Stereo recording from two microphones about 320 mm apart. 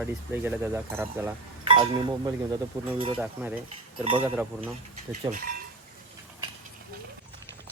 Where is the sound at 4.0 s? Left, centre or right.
Centre.